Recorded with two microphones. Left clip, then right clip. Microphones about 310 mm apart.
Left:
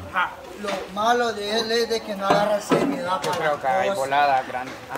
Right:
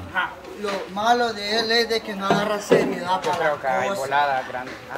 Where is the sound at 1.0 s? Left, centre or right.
Centre.